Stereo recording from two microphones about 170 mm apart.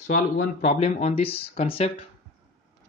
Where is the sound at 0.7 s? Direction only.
35° left (ahead or behind).